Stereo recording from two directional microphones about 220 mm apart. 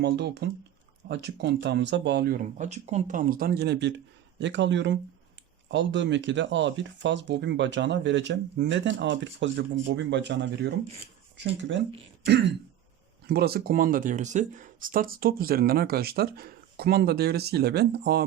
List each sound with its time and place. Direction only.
0.0 s speech: 50° right (ahead or behind)
13.2 s speech: 45° right (ahead or behind)